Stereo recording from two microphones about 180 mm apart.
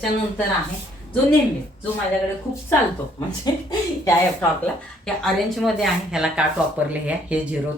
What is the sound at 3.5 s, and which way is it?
Speech, 20° left (ahead or behind).